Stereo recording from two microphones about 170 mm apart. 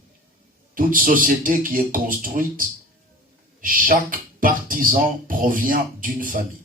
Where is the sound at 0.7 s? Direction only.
55° right (ahead or behind).